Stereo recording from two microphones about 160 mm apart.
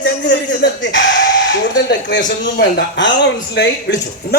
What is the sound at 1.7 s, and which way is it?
Speech, 90° left.